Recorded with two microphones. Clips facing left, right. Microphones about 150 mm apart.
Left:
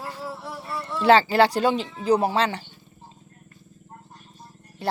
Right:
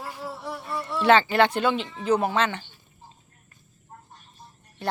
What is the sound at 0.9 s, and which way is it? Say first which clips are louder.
Speech: left 2 dB; 30° left (ahead or behind).